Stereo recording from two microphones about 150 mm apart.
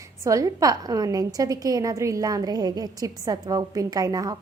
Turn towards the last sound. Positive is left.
turn(degrees=-25)  # may be behind; listen again after turning